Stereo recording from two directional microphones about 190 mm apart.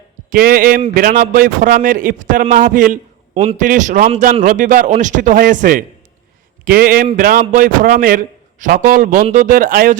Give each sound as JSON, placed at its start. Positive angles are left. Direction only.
{"t": 0.3, "sound": "a man's voice", "side_deg": -50}